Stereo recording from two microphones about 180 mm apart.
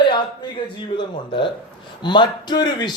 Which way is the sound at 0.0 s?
25° left (ahead or behind).